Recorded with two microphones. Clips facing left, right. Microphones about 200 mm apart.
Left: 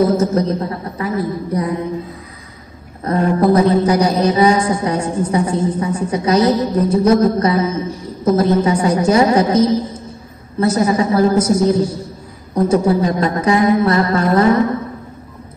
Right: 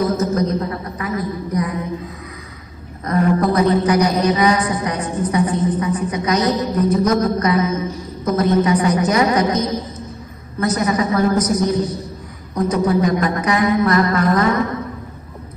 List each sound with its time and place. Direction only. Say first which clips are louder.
0.0 s a man's voice: left 4 dB; 30° left (ahead or behind)
3.1 s a man's voice: left 3 dB; 30° left (ahead or behind)